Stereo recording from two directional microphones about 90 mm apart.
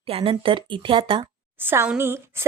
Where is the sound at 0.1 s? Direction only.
90° right; by 1.3 s 70° right (ahead or behind).